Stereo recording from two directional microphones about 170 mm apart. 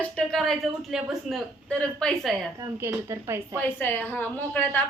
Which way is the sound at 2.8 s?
15° right (ahead or behind).